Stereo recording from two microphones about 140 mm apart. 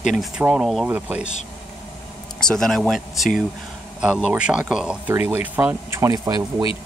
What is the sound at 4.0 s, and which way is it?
Speech, 10° right (ahead or behind).